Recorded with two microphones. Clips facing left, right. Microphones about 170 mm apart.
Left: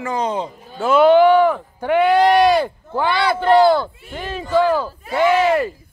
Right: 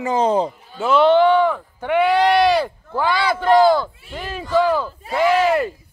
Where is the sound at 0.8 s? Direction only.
5° left (ahead or behind).